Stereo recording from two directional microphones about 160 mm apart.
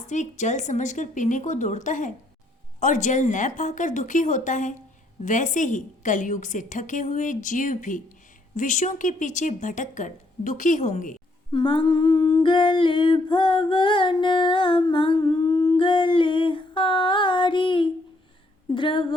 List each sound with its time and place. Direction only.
0.1 s a woman's voice: 50° left (ahead or behind)
11.5 s humming: 30° left (ahead or behind)
18.7 s speech: 30° left (ahead or behind)